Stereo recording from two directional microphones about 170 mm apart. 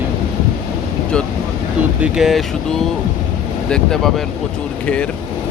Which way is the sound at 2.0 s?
5° right (ahead or behind).